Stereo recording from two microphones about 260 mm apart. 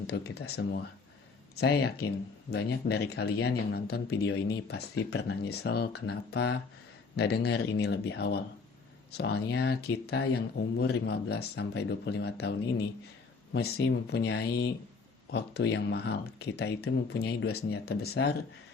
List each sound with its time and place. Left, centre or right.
0.1 s speech: left